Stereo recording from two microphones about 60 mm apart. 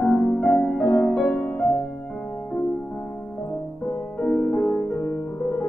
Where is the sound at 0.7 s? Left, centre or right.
Left.